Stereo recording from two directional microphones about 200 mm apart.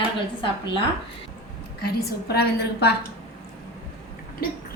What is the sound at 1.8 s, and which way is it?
A woman's voice, 50° left (ahead or behind).